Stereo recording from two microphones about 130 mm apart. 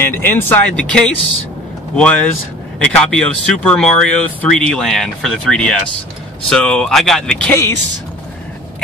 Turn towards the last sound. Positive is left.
turn(degrees=15)  # may be behind; listen again after turning